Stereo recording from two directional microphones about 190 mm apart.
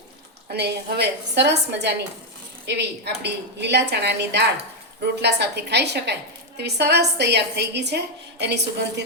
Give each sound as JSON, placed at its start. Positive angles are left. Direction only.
{"t": 0.5, "sound": "a woman's voice", "side_deg": -60}